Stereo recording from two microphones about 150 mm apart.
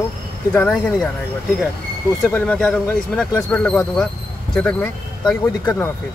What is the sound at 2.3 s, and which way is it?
Speech, 10° left (ahead or behind).